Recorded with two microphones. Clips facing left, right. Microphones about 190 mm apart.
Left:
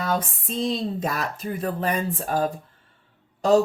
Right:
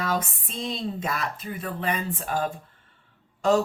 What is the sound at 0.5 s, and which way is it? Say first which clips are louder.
Speech: left 5 dB; 40° left (ahead or behind).